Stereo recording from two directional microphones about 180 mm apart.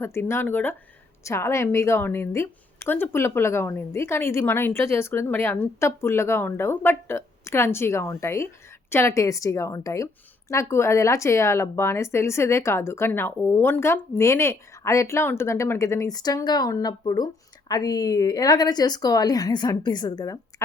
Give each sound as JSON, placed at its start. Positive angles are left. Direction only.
{"t": 0.0, "sound": "a woman's voice", "side_deg": 15}